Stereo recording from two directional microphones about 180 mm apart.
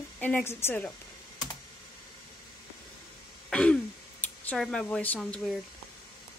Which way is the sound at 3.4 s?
5° left (ahead or behind).